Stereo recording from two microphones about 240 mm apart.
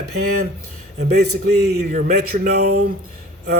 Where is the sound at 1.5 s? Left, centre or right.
Right.